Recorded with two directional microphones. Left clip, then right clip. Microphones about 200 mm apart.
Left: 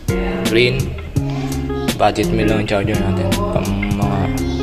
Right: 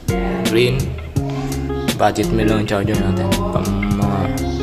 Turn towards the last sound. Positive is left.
turn(degrees=0)  # may be behind; listen again after turning